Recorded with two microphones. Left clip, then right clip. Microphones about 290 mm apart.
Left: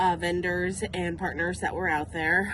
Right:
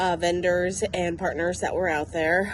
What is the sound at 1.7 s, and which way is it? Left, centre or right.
Speech, left.